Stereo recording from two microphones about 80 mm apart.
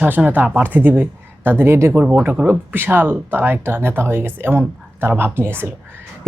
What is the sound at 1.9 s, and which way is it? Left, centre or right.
Speech, right.